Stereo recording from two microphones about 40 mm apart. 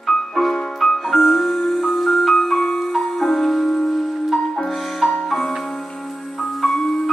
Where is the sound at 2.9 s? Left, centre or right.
Centre.